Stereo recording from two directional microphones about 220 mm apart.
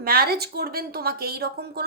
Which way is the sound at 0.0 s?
45° right (ahead or behind).